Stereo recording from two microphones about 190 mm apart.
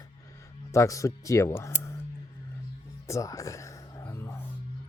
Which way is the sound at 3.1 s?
15° left (ahead or behind).